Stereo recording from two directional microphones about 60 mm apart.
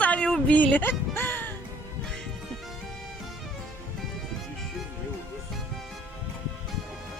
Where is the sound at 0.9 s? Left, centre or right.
Left.